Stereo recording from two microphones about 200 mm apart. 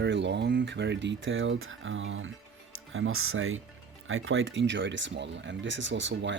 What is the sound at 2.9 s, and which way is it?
Speech, 85° right.